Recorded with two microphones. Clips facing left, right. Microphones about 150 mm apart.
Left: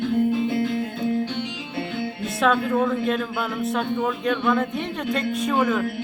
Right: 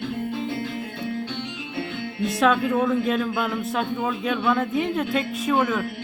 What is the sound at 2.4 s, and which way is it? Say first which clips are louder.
A man's voice: even; centre (ahead or behind).